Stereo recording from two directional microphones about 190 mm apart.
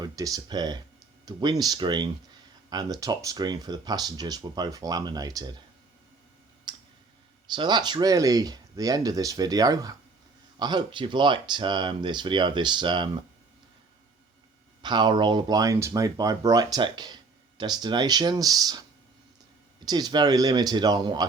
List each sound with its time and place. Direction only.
0.0 s speech: 20° right (ahead or behind)
6.7 s clicking: 25° right (ahead or behind)
7.5 s speech: 25° right (ahead or behind)
14.8 s speech: 25° right (ahead or behind)